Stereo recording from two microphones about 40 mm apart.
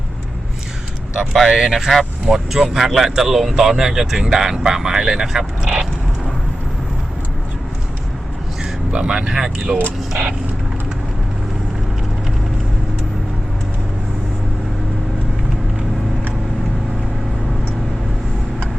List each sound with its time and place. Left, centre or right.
1.2 s speech: centre
1.5 s speech: centre
8.6 s speech: right